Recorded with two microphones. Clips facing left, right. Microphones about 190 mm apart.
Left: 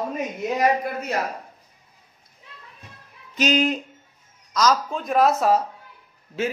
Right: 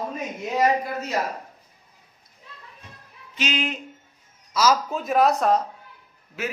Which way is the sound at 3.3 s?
40° left (ahead or behind).